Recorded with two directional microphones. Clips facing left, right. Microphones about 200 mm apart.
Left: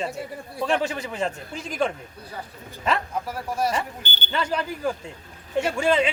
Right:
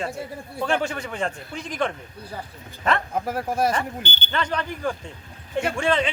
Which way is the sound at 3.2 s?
50° right (ahead or behind).